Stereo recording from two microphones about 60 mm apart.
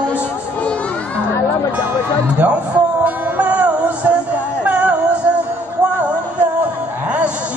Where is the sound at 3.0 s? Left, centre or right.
Right.